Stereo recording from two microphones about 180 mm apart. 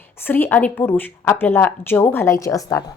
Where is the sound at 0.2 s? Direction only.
10° left (ahead or behind).